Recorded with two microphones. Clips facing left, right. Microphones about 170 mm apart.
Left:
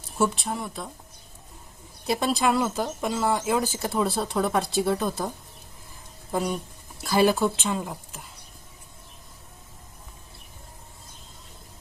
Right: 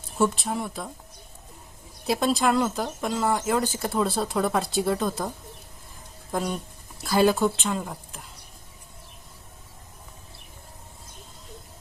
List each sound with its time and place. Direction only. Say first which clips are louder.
0.2 s speech: right 1 dB; centre (ahead or behind)
2.0 s speech: right 1 dB; centre (ahead or behind)
6.3 s speech: left 1 dB; 5° left (ahead or behind)